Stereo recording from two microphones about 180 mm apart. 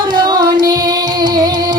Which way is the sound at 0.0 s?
25° right (ahead or behind).